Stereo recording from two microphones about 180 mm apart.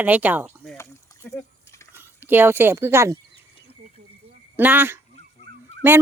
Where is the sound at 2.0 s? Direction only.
10° right (ahead or behind).